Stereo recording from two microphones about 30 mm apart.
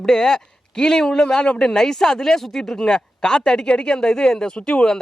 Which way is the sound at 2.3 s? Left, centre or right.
Centre.